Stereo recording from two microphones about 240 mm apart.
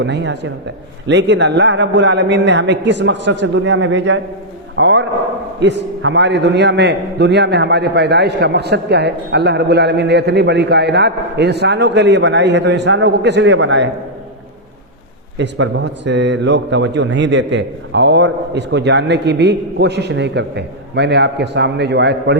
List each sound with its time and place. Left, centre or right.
0.0 s a man's voice: right
15.4 s a man's voice: right